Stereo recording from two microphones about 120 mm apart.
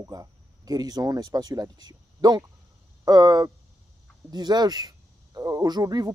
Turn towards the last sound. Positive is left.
turn(degrees=-35)  # may be behind; listen again after turning